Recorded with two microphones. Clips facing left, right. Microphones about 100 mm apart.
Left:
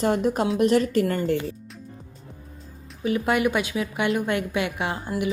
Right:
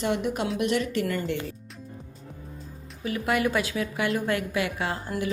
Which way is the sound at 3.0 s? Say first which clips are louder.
Left 4 dB; 25° left (ahead or behind).